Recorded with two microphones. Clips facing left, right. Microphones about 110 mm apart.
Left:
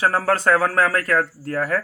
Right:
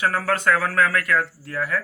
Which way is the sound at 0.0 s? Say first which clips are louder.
Left 3 dB; 30° left (ahead or behind).